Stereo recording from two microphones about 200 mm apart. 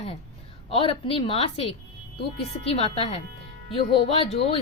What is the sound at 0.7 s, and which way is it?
Speech, 25° left (ahead or behind).